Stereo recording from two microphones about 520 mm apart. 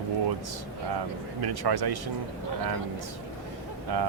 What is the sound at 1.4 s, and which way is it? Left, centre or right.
Speech, right.